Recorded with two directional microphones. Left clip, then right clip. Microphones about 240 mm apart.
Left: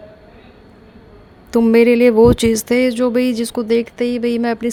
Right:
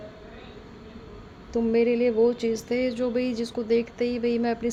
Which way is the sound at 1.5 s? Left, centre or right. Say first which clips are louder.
Left 11 dB; left.